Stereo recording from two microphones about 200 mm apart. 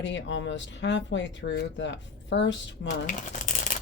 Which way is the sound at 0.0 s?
65° left (ahead or behind).